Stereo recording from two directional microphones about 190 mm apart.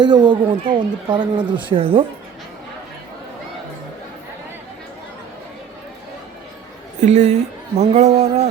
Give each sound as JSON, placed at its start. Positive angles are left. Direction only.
{"t": 0.0, "sound": "speech", "side_deg": -20}
{"t": 7.0, "sound": "a woman's voice", "side_deg": -35}